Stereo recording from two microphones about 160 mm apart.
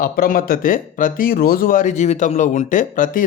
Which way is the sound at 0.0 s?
60° left (ahead or behind).